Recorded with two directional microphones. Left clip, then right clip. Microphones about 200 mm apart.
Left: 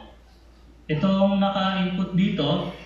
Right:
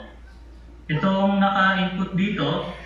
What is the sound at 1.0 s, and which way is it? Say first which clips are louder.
Mantra: right 2 dB; 20° left (ahead or behind).